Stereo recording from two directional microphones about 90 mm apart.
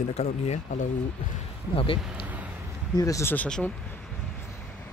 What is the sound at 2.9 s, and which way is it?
Speech, 40° left (ahead or behind).